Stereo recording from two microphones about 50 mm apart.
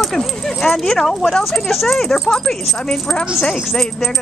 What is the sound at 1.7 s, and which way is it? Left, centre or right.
Speech, centre.